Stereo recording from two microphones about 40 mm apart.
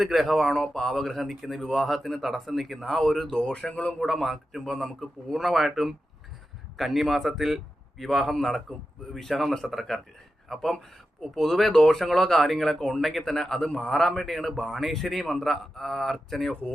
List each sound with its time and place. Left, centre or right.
0.0 s speech: centre
0.4 s speech: centre
3.7 s speech: left
4.0 s a man's voice: centre
8.0 s speech: centre
14.3 s speech: centre